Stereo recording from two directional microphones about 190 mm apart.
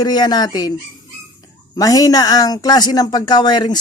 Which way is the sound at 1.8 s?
20° left (ahead or behind).